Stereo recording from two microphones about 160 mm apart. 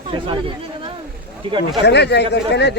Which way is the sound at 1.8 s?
90° left.